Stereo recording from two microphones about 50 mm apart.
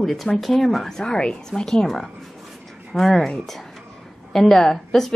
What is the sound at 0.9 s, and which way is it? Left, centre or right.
A woman's voice, centre.